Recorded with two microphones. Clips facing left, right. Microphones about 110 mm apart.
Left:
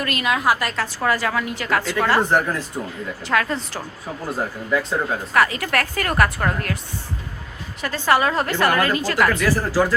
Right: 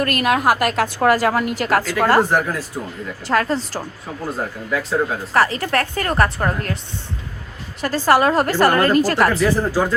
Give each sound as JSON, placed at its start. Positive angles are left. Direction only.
{"t": 0.0, "sound": "a woman's voice", "side_deg": -55}
{"t": 1.1, "sound": "a woman's voice", "side_deg": -45}
{"t": 2.3, "sound": "speech", "side_deg": -5}
{"t": 3.3, "sound": "a woman's voice", "side_deg": -35}
{"t": 4.3, "sound": "speech", "side_deg": 0}
{"t": 5.3, "sound": "a woman's voice", "side_deg": -35}
{"t": 7.8, "sound": "a woman's voice", "side_deg": -35}
{"t": 9.4, "sound": "a woman's voice", "side_deg": -20}